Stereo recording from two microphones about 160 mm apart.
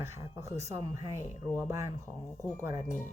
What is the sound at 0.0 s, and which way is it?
Speech, 20° right (ahead or behind).